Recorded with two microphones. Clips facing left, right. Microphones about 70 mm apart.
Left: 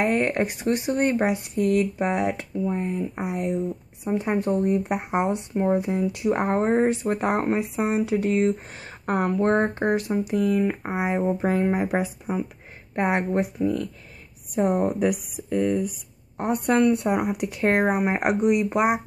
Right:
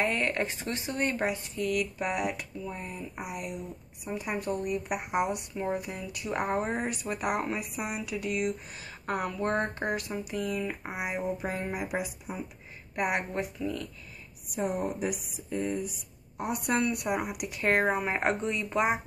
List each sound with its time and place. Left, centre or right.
0.0 s speech: left
1.5 s speech: left
12.9 s speech: left
13.6 s a woman's voice: left
16.3 s speech: left
16.9 s speech: left